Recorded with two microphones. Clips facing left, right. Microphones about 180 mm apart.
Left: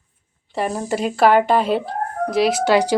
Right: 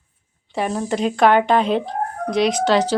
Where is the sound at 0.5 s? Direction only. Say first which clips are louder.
Even; centre (ahead or behind).